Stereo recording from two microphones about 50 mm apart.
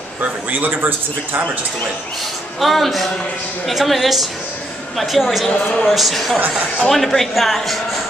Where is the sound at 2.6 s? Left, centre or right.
Centre.